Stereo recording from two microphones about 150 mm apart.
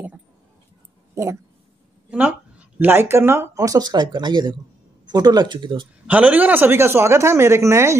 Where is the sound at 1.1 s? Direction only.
20° right (ahead or behind).